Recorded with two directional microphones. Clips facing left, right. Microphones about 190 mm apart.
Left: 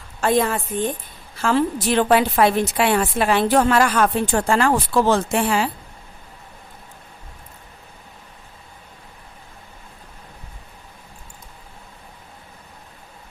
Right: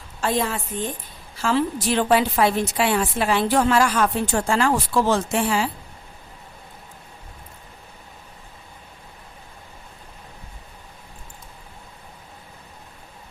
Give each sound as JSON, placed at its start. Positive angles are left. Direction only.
{"t": 0.2, "sound": "a woman's voice", "side_deg": 55}